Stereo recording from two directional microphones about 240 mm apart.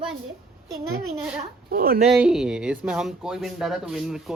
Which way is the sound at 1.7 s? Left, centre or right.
Right.